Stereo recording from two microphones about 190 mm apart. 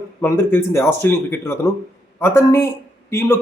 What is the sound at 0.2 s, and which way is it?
A man's voice, 15° left (ahead or behind).